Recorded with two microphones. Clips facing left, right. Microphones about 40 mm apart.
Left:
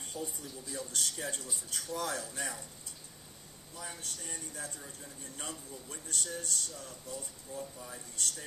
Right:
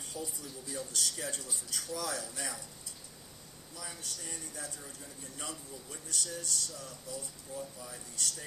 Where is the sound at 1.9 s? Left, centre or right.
Left.